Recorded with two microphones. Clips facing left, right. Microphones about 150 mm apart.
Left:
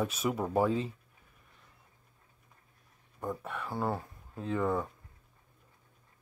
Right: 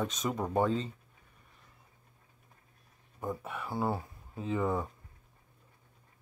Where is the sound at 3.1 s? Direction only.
5° right (ahead or behind).